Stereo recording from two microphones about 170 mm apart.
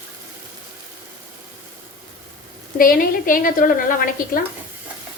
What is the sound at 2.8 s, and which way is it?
A woman's voice, 55° left (ahead or behind).